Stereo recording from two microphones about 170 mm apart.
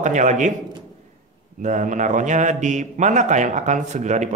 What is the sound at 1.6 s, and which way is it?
A man's voice, 50° right (ahead or behind).